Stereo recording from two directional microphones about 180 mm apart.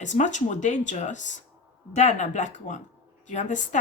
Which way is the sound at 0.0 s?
45° left (ahead or behind).